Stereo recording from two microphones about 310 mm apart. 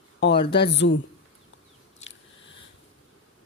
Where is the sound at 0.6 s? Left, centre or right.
Left.